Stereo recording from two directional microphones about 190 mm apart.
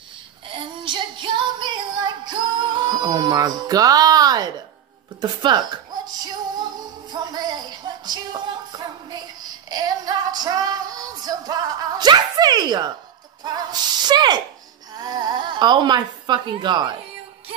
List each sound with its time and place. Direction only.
0.8 s music: 25° right (ahead or behind)
5.2 s speech: 20° right (ahead or behind)
7.1 s music: 20° right (ahead or behind)
13.4 s snake: 20° right (ahead or behind)
15.0 s a sound: 20° right (ahead or behind)